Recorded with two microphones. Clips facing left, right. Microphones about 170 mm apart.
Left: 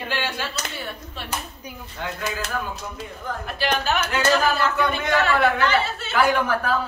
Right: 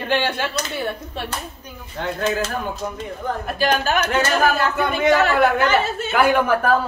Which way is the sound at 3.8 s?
50° right (ahead or behind).